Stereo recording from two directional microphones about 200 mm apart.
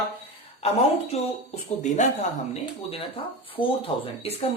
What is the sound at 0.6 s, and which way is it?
Speech, 30° left (ahead or behind).